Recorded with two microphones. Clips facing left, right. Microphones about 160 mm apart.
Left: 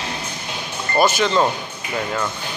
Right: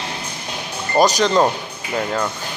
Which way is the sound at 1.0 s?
40° right (ahead or behind).